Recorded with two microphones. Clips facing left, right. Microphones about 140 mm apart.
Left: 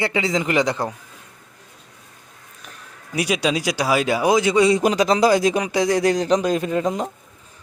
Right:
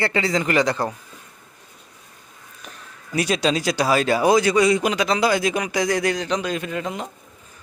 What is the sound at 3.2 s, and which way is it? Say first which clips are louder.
A man's voice: even; 10° left (ahead or behind).